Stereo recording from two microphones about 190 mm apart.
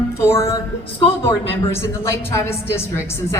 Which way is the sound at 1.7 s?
15° left (ahead or behind).